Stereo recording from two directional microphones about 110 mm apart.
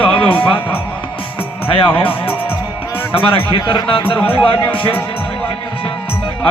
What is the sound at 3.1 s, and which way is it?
A man's voice, 50° left (ahead or behind).